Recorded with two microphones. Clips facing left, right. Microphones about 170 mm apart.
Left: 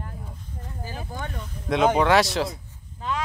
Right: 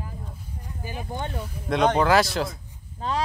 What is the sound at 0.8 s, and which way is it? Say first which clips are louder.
Speech: right 3 dB; 15° right (ahead or behind).